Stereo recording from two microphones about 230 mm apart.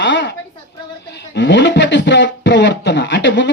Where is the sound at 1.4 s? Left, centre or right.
Left.